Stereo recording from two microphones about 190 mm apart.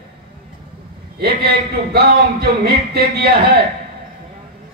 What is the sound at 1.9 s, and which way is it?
A man's voice, 55° right (ahead or behind).